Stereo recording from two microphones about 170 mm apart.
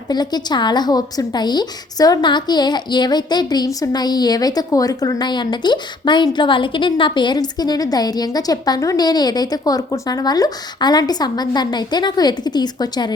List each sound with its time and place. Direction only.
0.1 s a woman's voice: 25° left (ahead or behind)